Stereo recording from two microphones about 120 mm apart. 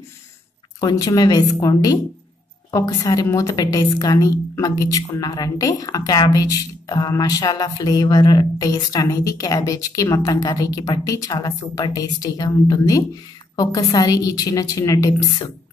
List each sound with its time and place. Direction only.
0.7 s a woman's voice: 30° left (ahead or behind)